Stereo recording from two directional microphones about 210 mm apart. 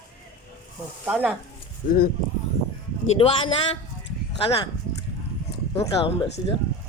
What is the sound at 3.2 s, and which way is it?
Speech, 25° left (ahead or behind).